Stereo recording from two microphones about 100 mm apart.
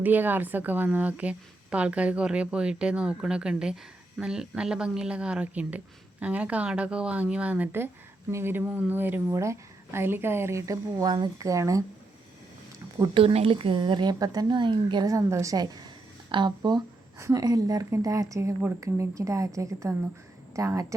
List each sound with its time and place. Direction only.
0.0 s a woman's voice: 20° right (ahead or behind)
13.1 s a woman's voice: 70° right (ahead or behind); by 15.0 s 50° right (ahead or behind)
15.0 s a woman's voice: 30° right (ahead or behind); by 16.8 s 50° right (ahead or behind)
17.2 s speech: 30° right (ahead or behind)
17.4 s speech: 40° right (ahead or behind)